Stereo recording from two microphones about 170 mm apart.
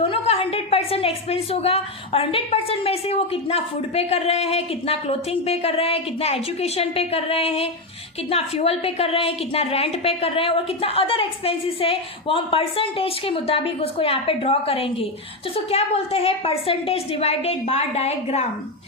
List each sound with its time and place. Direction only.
0.1 s a woman's voice: 35° left (ahead or behind)